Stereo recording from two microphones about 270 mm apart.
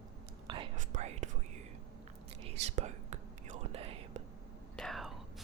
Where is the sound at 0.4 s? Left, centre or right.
Centre.